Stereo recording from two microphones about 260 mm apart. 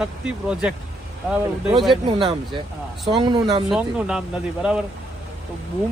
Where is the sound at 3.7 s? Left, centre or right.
Centre.